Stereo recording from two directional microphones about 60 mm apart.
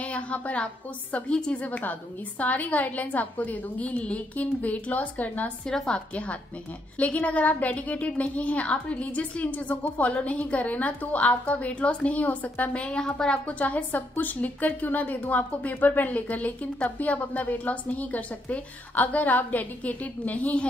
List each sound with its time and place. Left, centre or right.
0.0 s a woman's voice: left
5.7 s a woman's voice: centre
13.5 s a woman's voice: left